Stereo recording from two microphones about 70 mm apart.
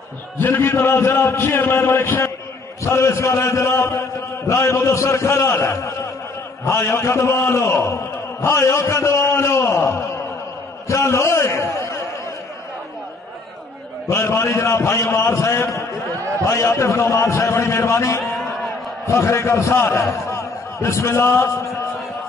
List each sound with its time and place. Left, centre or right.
0.4 s a man's voice: left
14.0 s a man's voice: left